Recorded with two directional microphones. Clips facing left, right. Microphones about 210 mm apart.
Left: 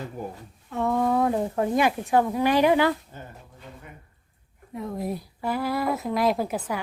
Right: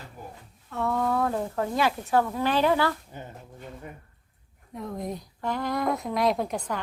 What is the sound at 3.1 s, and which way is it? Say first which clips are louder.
Speech: right 1 dB; 15° right (ahead or behind).